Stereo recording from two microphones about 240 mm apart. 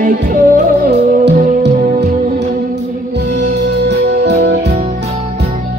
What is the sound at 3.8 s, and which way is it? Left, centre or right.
Music, right.